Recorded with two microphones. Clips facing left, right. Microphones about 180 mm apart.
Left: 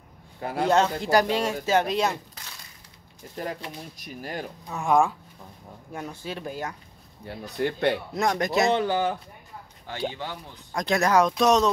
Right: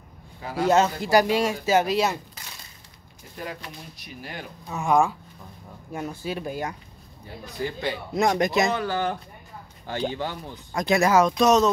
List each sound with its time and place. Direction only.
0.4 s a man's voice: 55° left (ahead or behind)
0.7 s speech: 5° right (ahead or behind)
3.4 s speech: 35° left (ahead or behind)
4.6 s speech: centre (ahead or behind)
7.2 s speech: 65° left (ahead or behind)
8.1 s speech: 20° right (ahead or behind)
8.6 s speech: 25° left (ahead or behind)
8.9 s speech: 10° left (ahead or behind)
10.7 s speech: 5° right (ahead or behind)